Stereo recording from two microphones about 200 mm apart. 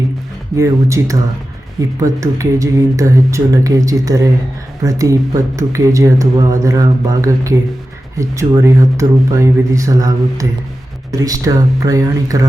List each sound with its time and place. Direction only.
0.5 s speech: 15° right (ahead or behind)